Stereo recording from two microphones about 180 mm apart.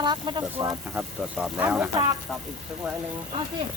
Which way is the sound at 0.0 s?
25° right (ahead or behind).